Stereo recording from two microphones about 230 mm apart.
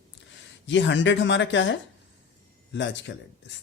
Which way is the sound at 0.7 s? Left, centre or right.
Left.